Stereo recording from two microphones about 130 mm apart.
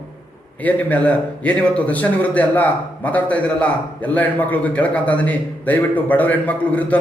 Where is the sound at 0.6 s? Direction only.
10° left (ahead or behind).